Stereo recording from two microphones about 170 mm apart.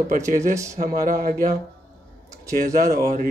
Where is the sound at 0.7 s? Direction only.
45° right (ahead or behind).